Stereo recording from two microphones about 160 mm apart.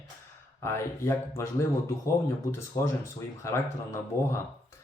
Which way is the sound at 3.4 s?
15° left (ahead or behind).